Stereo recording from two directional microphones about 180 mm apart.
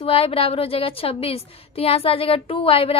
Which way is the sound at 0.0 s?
30° left (ahead or behind).